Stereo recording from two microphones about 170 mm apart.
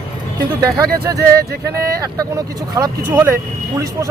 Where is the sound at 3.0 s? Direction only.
10° right (ahead or behind).